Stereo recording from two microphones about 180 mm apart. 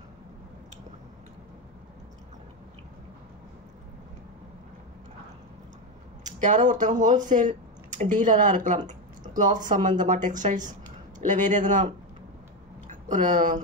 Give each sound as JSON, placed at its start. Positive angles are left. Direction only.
{"t": 6.2, "sound": "a woman's voice", "side_deg": -45}